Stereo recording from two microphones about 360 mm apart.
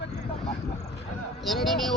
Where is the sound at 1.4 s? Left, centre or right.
Centre.